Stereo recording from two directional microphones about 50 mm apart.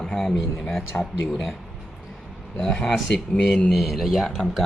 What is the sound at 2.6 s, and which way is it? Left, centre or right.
Speech, centre.